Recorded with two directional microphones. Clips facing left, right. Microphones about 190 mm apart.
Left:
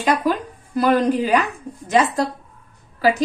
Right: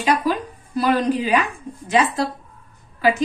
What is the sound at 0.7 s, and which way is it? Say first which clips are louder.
A woman's voice: left 2 dB; 45° left (ahead or behind).